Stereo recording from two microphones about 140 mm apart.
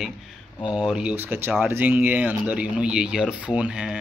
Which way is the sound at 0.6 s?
35° left (ahead or behind).